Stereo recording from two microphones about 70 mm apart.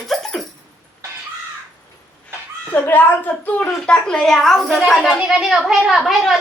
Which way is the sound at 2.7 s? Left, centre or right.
Left.